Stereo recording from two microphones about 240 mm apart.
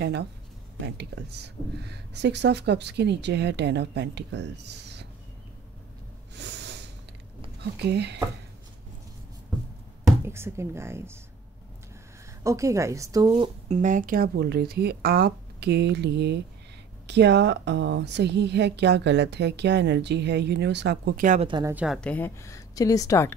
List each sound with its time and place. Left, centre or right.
0.0 s a woman's voice: right
6.3 s snort: right
7.8 s a woman's voice: right
10.0 s speech: centre
12.4 s speech: centre
13.3 s a woman's voice: right
21.5 s speech: centre
21.7 s a woman's voice: centre